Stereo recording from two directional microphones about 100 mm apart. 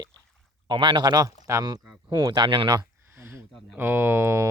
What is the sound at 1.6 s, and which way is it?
Speech, 45° right (ahead or behind).